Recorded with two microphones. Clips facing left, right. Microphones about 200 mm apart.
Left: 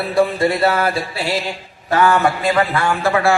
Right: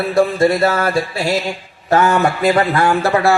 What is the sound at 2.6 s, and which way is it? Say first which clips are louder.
Speech: right 3 dB; 40° right (ahead or behind).